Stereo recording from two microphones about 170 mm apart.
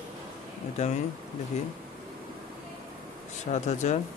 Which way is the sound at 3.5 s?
45° left (ahead or behind).